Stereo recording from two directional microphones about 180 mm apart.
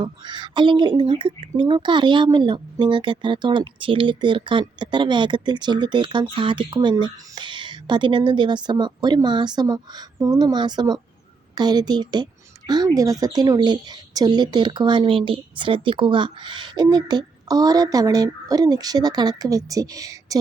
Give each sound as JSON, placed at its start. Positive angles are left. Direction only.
{"t": 0.0, "sound": "speech", "side_deg": -25}